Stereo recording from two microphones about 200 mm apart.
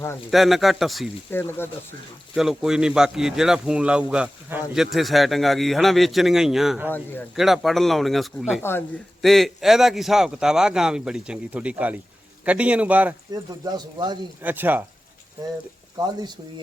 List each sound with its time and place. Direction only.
0.3 s speech: centre (ahead or behind)
1.3 s speech: 10° left (ahead or behind)
2.3 s a man's voice: centre (ahead or behind)
13.7 s speech: 20° right (ahead or behind)
14.4 s a man's voice: 10° right (ahead or behind)